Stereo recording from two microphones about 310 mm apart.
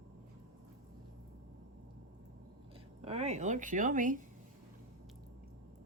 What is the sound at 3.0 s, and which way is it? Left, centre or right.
A woman's voice, right.